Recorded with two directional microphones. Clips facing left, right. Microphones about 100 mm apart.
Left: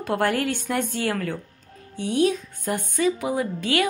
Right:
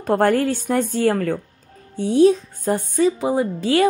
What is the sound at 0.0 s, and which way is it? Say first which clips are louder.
A woman's voice: right 6 dB; 40° right (ahead or behind).